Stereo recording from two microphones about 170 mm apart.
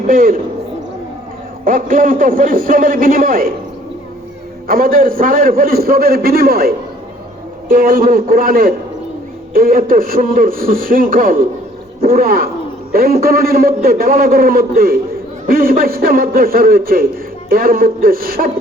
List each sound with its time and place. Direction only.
0.1 s a man's voice: 55° right (ahead or behind)
1.6 s a man's voice: 55° right (ahead or behind)
4.7 s a man's voice: 60° right (ahead or behind)